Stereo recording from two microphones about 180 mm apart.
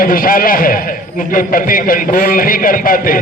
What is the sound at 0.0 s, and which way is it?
A man's voice, 50° left (ahead or behind).